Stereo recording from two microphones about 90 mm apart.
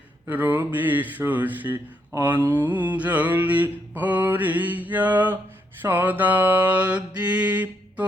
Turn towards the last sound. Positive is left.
turn(degrees=-15)  # may be behind; listen again after turning